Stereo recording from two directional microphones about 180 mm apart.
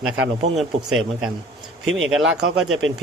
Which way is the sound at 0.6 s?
5° right (ahead or behind).